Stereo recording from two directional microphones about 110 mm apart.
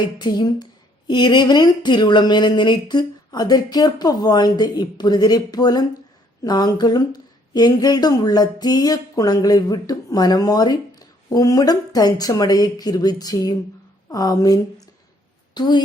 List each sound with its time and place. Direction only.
0.2 s a woman's voice: 40° left (ahead or behind)